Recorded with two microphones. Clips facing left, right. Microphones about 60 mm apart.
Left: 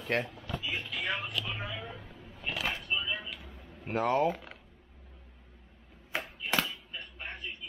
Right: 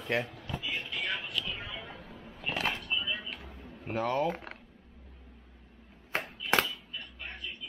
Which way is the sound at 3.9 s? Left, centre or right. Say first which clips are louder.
Left 2 dB; left.